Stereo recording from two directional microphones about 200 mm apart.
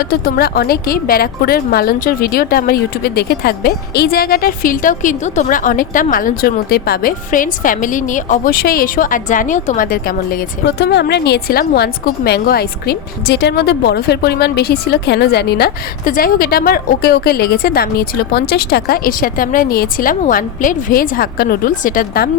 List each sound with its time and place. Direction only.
0.0 s speech: 50° left (ahead or behind)